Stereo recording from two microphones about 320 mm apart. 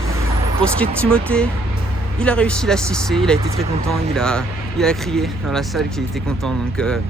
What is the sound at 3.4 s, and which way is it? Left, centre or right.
Speech, centre.